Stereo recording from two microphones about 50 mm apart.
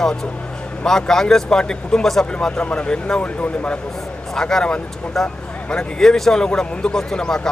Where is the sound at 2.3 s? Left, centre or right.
Left.